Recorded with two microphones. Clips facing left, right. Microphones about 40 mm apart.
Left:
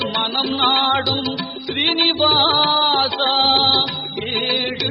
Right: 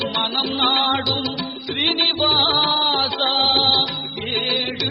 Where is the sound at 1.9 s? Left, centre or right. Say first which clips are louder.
Left 3 dB; centre.